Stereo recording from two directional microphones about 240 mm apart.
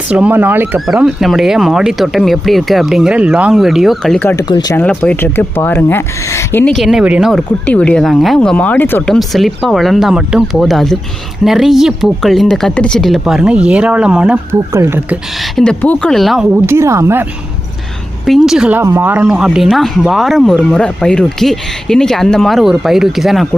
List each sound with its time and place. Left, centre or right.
0.1 s speech: centre
18.3 s speech: centre